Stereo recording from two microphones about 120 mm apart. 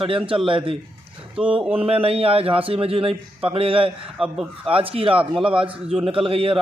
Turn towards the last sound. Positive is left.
turn(degrees=-50)  # may be behind; listen again after turning